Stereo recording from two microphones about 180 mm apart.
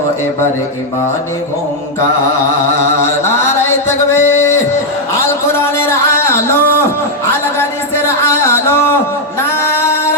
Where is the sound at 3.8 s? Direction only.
15° left (ahead or behind).